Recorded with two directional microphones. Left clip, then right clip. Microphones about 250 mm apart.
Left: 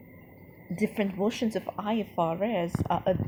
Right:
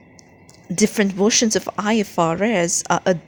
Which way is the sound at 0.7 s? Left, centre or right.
Right.